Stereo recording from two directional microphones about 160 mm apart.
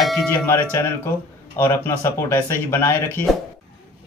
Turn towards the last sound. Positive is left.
turn(degrees=15)  # may be behind; listen again after turning